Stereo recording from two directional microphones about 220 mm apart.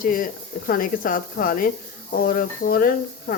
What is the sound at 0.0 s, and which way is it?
Speech, 40° left (ahead or behind).